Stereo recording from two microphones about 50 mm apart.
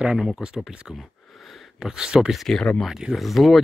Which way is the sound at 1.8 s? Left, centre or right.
Centre.